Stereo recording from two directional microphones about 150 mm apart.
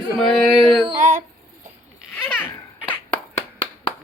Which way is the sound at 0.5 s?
25° left (ahead or behind).